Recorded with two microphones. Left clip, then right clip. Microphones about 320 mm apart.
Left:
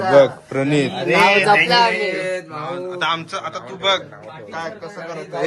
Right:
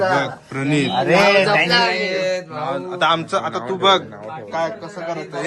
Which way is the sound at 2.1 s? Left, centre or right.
Centre.